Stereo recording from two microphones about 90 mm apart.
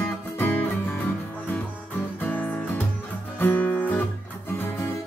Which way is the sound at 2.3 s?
20° left (ahead or behind).